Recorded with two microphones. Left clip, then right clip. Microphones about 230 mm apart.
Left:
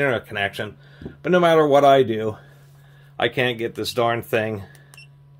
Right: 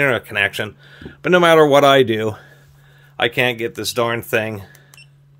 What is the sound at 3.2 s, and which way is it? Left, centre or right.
Speech, right.